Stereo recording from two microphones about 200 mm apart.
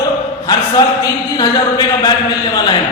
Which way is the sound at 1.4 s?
20° left (ahead or behind).